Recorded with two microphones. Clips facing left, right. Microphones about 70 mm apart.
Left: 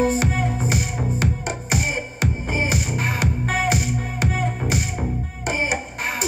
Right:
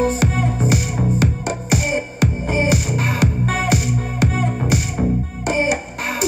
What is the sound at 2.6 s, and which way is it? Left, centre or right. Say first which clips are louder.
Music: right 5 dB; right.